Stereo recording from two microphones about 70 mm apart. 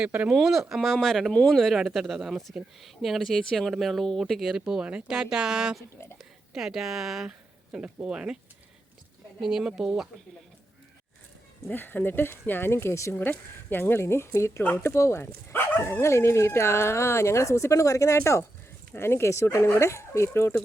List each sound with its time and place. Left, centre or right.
0.3 s speech: centre
1.3 s speech: centre
1.5 s speech: centre
9.4 s speech: centre
11.7 s speech: left